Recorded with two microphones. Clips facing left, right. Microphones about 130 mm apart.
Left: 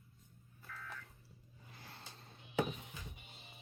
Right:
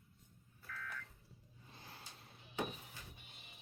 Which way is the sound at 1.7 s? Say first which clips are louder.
Left 1 dB; 15° right (ahead or behind).